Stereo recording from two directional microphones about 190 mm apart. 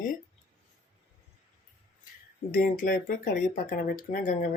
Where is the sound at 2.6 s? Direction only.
50° left (ahead or behind).